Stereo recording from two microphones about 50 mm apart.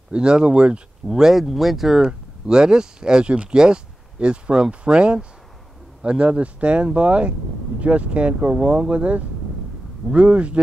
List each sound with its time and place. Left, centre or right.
0.1 s speech: centre
1.1 s speech: centre; by 8.5 s right
8.5 s speech: centre
8.9 s speech: right